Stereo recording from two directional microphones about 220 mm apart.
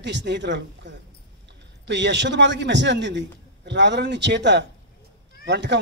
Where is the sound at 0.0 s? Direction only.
50° right (ahead or behind).